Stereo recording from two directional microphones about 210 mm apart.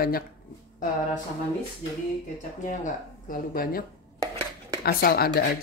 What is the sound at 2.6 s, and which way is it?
Speech, 40° left (ahead or behind).